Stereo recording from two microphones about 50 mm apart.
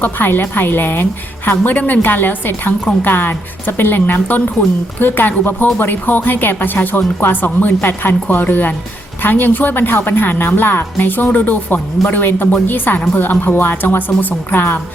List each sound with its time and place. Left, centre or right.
0.0 s a woman's voice: left